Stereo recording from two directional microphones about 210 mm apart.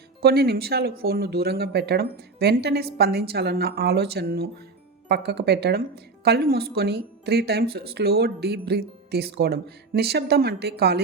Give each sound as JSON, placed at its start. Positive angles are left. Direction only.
{"t": 0.2, "sound": "speech", "side_deg": -50}